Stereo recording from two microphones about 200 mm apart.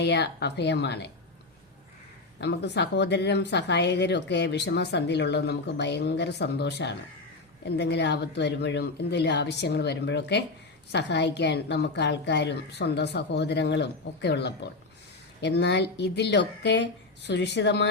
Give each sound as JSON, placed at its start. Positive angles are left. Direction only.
{"t": 0.0, "sound": "speech", "side_deg": 60}
{"t": 2.4, "sound": "speech", "side_deg": 55}